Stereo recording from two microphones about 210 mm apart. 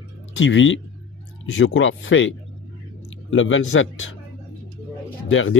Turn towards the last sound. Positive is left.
turn(degrees=65)  # may be behind; listen again after turning